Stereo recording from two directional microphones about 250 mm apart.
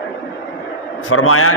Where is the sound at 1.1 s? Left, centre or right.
Left.